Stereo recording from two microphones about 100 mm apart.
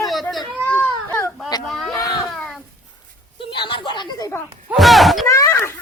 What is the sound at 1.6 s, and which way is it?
Speech, centre (ahead or behind).